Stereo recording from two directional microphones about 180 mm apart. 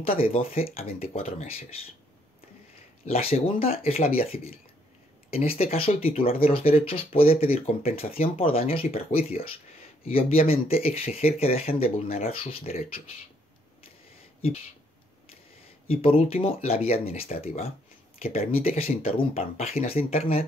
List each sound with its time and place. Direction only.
0.0 s speech: 30° left (ahead or behind)
3.1 s speech: 35° left (ahead or behind)
15.9 s speech: 30° left (ahead or behind)